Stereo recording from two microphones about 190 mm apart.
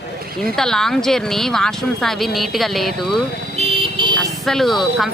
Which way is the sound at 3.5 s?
25° right (ahead or behind).